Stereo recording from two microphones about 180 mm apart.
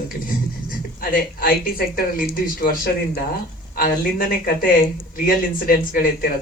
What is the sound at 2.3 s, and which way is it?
Speech, 55° left (ahead or behind).